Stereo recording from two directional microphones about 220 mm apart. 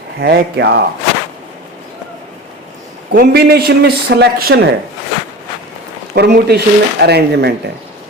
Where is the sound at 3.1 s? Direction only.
45° right (ahead or behind).